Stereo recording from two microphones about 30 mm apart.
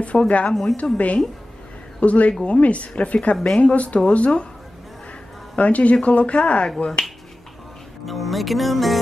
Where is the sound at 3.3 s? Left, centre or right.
Centre.